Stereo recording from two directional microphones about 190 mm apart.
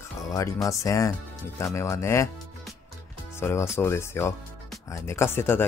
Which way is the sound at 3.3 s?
15° left (ahead or behind).